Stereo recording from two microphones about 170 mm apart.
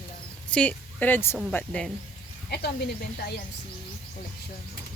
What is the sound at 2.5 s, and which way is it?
Speech, 70° left (ahead or behind).